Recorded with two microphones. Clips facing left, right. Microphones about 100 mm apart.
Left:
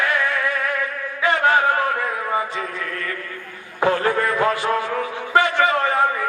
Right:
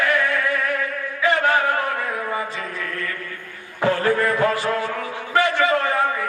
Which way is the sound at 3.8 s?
20° left (ahead or behind).